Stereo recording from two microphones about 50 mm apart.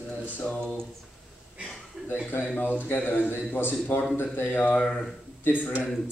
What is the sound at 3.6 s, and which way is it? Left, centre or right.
A man's voice, left.